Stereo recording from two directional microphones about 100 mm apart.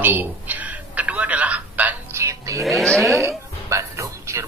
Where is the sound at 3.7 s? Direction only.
30° right (ahead or behind).